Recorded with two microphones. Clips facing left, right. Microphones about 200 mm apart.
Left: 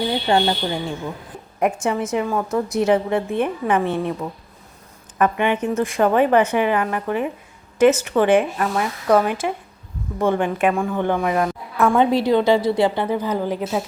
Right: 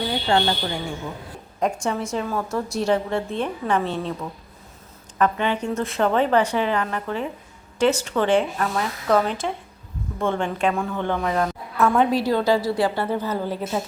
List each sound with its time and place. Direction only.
0.1 s a woman's voice: 20° left (ahead or behind)
11.9 s a woman's voice: 25° left (ahead or behind)